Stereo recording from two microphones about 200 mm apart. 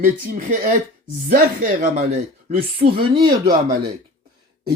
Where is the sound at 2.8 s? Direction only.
45° right (ahead or behind).